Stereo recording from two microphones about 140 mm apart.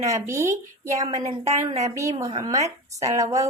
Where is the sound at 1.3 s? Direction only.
50° right (ahead or behind).